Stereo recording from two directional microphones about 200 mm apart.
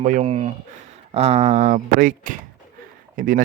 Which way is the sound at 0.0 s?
35° right (ahead or behind).